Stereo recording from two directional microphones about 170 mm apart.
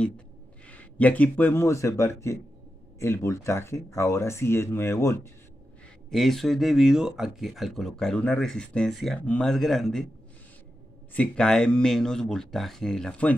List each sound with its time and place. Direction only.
0.7 s speech: 10° left (ahead or behind)
6.0 s speech: centre (ahead or behind)
11.1 s speech: 5° left (ahead or behind)